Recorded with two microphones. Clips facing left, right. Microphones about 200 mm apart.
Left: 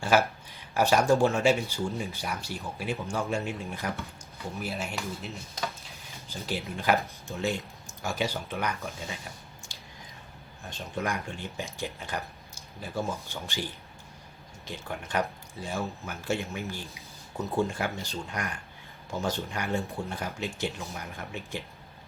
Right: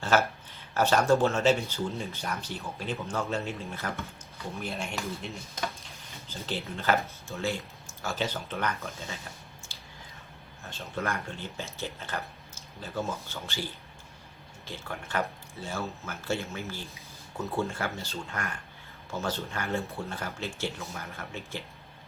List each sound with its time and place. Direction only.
0.0 s speech: 15° left (ahead or behind)
4.6 s speech: 5° left (ahead or behind)
6.2 s speech: 10° left (ahead or behind)
9.7 s a sound: 15° left (ahead or behind)
10.6 s speech: 15° left (ahead or behind)
14.7 s speech: 15° left (ahead or behind)